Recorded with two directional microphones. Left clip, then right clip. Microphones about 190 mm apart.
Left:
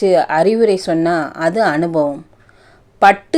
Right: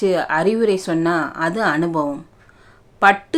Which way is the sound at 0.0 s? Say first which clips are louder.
Left 5 dB; 25° left (ahead or behind).